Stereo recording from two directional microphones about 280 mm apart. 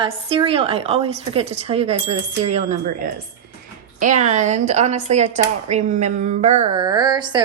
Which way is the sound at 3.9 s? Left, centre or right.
Right.